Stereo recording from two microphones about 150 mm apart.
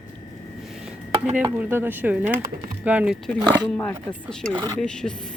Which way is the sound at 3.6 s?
10° left (ahead or behind).